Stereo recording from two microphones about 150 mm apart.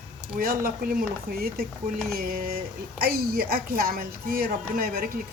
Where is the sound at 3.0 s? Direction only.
85° right.